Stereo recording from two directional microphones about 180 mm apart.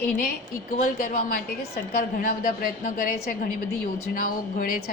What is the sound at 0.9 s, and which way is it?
A woman's voice, 50° left (ahead or behind).